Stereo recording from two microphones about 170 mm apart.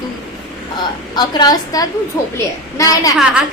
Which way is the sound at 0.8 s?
25° left (ahead or behind).